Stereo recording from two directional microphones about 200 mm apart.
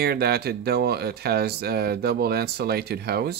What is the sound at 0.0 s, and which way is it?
Speech, 50° right (ahead or behind).